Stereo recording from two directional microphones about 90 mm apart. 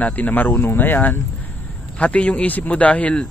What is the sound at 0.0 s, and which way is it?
A man's voice, 15° left (ahead or behind).